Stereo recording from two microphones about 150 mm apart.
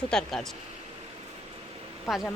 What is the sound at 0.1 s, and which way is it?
Speech, 5° left (ahead or behind).